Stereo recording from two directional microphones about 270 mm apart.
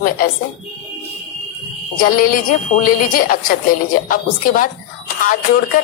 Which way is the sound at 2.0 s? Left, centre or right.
Left.